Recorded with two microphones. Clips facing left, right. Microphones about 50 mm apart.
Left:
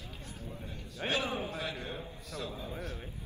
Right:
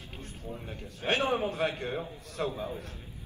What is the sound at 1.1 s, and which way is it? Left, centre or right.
A man's voice, right.